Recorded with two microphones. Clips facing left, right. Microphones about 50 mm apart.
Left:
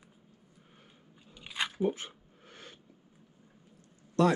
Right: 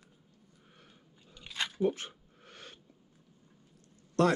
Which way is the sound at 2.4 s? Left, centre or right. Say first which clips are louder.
Even; right.